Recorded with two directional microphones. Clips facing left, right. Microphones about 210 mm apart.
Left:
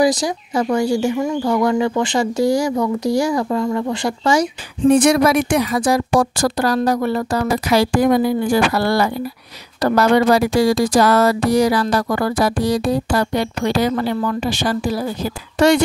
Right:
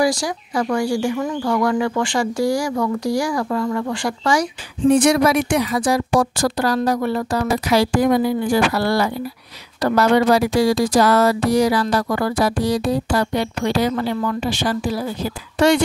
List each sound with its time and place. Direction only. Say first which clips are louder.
0.0 s speech: left 3 dB; 20° left (ahead or behind)
4.8 s speech: left 2 dB; 55° left (ahead or behind)